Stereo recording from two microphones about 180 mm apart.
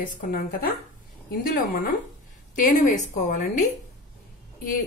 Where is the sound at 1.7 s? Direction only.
55° left (ahead or behind).